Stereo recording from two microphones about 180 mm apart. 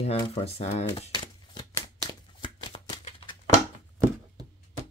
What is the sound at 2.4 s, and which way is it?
Shuffling cards, 30° left (ahead or behind).